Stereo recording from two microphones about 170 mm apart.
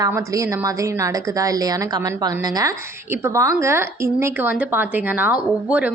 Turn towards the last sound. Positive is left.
turn(degrees=-10)  # may be behind; listen again after turning